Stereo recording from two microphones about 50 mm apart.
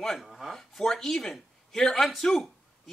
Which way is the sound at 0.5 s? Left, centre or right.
Centre.